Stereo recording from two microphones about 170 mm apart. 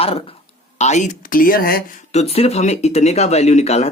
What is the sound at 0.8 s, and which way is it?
Speech, 45° left (ahead or behind).